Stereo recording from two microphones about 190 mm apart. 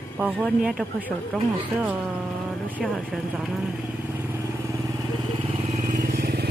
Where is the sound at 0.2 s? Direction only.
5° right (ahead or behind).